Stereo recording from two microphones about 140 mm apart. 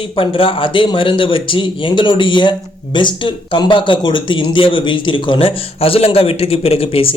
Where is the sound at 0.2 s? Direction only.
40° left (ahead or behind).